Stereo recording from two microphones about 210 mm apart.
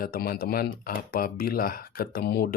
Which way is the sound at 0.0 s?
45° left (ahead or behind).